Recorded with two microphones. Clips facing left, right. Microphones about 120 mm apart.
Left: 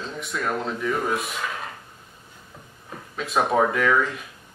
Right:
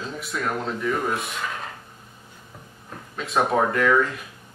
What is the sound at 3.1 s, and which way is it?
Speech, centre (ahead or behind).